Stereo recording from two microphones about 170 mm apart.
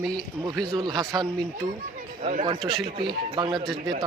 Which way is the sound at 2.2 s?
40° right (ahead or behind).